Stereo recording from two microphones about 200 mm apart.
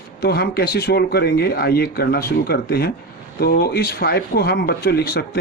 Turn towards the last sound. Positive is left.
turn(degrees=50)  # may be behind; listen again after turning